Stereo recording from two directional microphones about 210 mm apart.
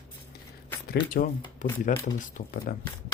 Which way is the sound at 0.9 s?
45° left (ahead or behind).